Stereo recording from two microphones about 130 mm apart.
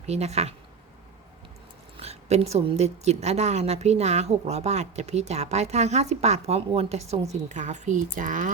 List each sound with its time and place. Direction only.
0.0 s a woman's voice: 55° right (ahead or behind)
2.0 s a woman's voice: 55° right (ahead or behind); by 8.4 s 80° right